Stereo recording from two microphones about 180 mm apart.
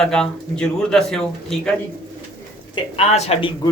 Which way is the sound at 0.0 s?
5° left (ahead or behind).